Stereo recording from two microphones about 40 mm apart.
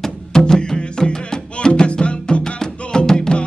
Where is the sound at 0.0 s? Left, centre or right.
Centre.